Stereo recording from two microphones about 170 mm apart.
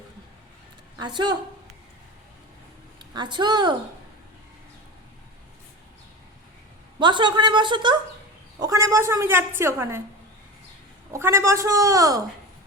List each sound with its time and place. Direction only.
0.9 s a woman's voice: 25° right (ahead or behind)
3.1 s a woman's voice: 25° right (ahead or behind)
7.0 s a woman's voice: 25° right (ahead or behind)
11.1 s a woman's voice: 15° right (ahead or behind)